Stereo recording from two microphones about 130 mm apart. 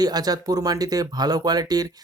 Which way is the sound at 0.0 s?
30° right (ahead or behind).